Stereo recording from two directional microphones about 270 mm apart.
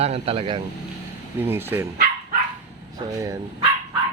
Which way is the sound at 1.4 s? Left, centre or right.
Centre.